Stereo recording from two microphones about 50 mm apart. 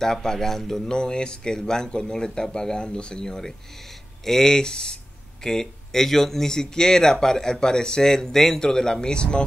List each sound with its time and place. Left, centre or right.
0.0 s speech: centre